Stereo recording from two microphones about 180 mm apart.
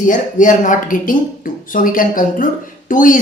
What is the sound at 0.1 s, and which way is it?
A woman's voice, 45° left (ahead or behind).